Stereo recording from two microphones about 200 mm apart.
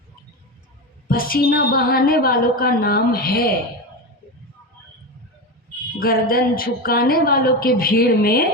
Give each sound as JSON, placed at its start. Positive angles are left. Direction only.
{"t": 1.0, "sound": "a woman's voice", "side_deg": 45}
{"t": 6.0, "sound": "a woman's voice", "side_deg": 45}